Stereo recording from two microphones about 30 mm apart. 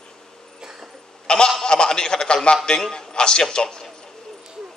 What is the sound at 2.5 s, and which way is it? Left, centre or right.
A man's voice, left.